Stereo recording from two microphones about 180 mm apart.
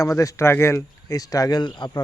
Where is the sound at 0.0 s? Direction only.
15° left (ahead or behind).